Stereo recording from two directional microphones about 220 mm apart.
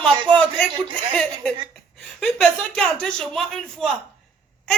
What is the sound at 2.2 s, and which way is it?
Speech, centre (ahead or behind).